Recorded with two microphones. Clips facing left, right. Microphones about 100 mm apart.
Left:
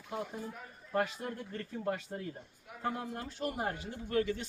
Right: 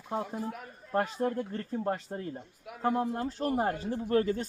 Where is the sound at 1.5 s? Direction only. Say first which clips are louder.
Right 4 dB; 30° right (ahead or behind).